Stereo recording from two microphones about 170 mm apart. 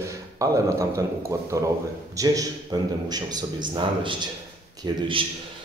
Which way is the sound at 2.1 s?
20° right (ahead or behind).